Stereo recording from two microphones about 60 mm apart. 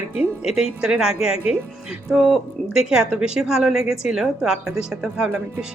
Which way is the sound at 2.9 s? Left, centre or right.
Centre.